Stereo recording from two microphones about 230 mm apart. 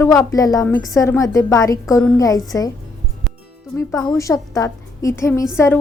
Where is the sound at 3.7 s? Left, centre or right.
Centre.